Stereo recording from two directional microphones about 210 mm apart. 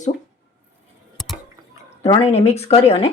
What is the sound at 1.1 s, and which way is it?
Drip, centre (ahead or behind).